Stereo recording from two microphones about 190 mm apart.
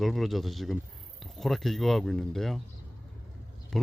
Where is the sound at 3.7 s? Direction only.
Centre (ahead or behind).